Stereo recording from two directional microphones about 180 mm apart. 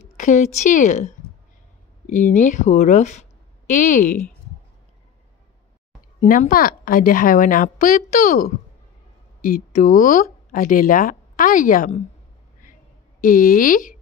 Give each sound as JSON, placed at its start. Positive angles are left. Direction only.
{"t": 0.2, "sound": "a woman's voice", "side_deg": 45}
{"t": 6.2, "sound": "a woman's voice", "side_deg": 50}
{"t": 13.2, "sound": "a woman's voice", "side_deg": 50}